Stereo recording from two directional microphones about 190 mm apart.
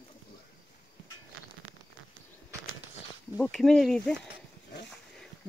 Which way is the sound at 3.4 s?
Centre (ahead or behind).